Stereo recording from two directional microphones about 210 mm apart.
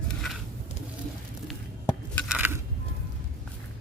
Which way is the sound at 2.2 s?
10° right (ahead or behind).